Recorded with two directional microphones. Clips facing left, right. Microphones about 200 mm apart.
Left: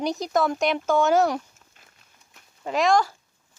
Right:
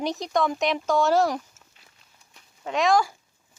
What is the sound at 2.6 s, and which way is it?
Speech, centre (ahead or behind).